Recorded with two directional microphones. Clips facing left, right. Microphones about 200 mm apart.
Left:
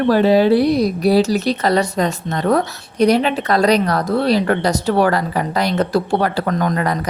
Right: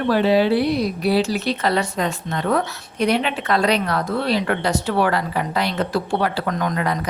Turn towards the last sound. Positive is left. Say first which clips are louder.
# left 3 dB
turn(degrees=40)  # may be behind; listen again after turning